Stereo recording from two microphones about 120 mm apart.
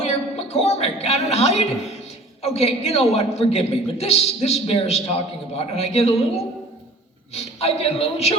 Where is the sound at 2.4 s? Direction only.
60° left (ahead or behind).